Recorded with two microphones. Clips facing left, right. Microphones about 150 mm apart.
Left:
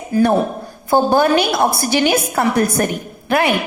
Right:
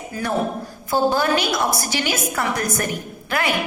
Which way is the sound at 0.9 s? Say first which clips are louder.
Left 5 dB; 60° left (ahead or behind).